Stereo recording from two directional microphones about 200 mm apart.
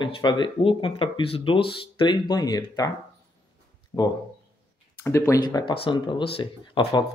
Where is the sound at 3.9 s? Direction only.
20° left (ahead or behind).